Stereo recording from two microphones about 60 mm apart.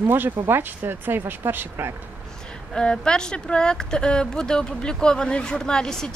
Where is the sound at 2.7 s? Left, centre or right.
Centre.